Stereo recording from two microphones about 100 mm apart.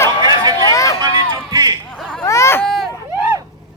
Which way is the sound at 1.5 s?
40° right (ahead or behind).